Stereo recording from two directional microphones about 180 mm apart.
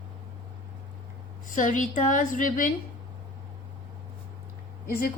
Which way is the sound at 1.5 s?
45° left (ahead or behind).